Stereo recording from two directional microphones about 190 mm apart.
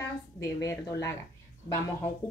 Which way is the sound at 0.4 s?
15° left (ahead or behind).